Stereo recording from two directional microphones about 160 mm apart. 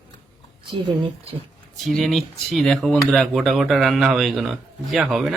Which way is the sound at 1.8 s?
Centre (ahead or behind).